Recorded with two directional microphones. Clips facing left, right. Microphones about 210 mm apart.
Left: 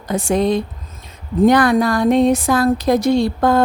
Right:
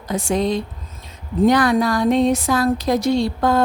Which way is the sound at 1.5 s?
55° left (ahead or behind).